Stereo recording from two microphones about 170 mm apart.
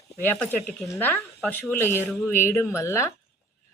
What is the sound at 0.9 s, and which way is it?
A woman's voice, 10° left (ahead or behind).